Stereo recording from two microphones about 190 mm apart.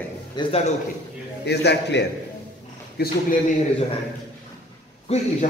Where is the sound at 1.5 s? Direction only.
65° left (ahead or behind).